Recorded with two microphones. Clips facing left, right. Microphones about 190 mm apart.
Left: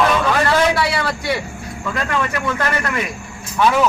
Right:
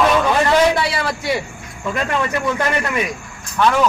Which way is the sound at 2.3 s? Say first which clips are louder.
Right 2 dB; 15° right (ahead or behind).